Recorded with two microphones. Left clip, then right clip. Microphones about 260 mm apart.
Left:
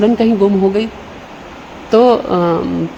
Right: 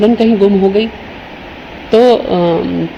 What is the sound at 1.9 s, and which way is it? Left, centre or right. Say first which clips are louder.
Speech: right 2 dB; left.